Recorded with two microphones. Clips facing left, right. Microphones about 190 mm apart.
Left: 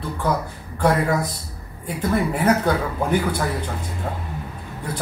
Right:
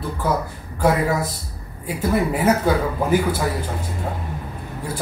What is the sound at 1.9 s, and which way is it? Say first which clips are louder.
Speech: right 1 dB; 5° right (ahead or behind).